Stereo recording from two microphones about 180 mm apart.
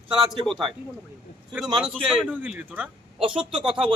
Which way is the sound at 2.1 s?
5° right (ahead or behind).